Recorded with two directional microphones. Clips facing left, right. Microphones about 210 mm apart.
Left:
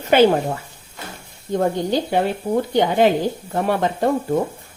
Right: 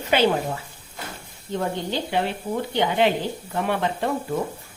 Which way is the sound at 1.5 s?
45° left (ahead or behind).